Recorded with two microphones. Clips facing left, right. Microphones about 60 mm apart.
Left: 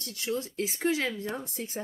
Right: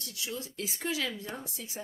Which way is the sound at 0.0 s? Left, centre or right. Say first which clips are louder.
Left 6 dB; left.